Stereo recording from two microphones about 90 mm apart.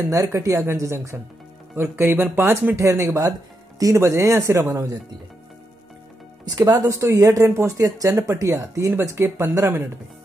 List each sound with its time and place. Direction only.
0.0 s speech: 35° right (ahead or behind)
6.6 s speech: 40° right (ahead or behind)